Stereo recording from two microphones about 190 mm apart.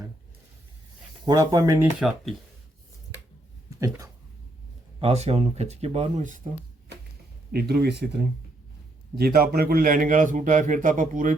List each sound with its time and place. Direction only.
1.2 s speech: 20° right (ahead or behind)
2.0 s speech: centre (ahead or behind)
3.8 s speech: 15° right (ahead or behind)
4.9 s speech: 35° right (ahead or behind)
7.5 s a man's voice: 55° right (ahead or behind)